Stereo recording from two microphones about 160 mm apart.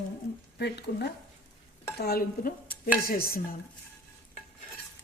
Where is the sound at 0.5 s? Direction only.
90° left.